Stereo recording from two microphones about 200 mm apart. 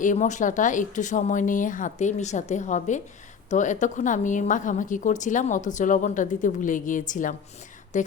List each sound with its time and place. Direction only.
0.0 s speech: 40° left (ahead or behind)